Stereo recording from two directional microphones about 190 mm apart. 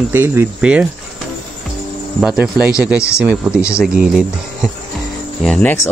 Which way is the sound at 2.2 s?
5° right (ahead or behind).